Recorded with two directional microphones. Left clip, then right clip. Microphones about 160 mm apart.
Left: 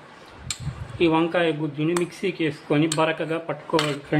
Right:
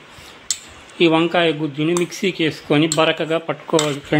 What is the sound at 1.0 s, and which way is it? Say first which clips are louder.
Speech: right 5 dB; 45° right (ahead or behind).